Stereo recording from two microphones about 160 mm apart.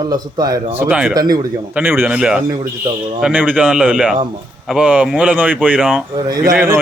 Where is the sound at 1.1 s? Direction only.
25° right (ahead or behind).